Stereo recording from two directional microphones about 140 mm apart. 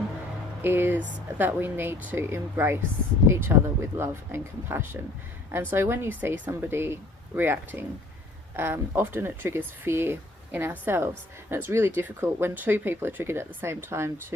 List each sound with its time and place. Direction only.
0.6 s speech: 15° right (ahead or behind)